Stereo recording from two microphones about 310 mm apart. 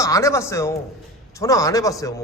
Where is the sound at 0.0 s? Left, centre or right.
Centre.